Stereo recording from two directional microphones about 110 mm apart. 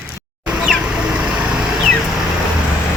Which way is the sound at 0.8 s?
10° right (ahead or behind).